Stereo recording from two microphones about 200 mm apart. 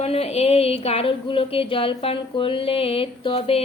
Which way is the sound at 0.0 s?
30° left (ahead or behind).